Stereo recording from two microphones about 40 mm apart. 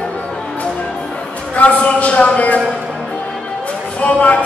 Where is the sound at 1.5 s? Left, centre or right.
Left.